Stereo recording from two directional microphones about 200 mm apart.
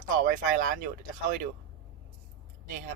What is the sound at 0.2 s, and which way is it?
Speech, 45° right (ahead or behind).